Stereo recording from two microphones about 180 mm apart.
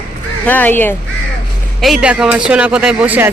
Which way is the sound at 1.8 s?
5° right (ahead or behind).